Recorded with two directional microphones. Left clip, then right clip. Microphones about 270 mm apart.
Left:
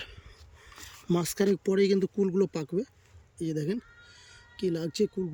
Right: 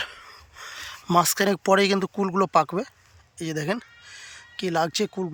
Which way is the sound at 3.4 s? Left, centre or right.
Centre.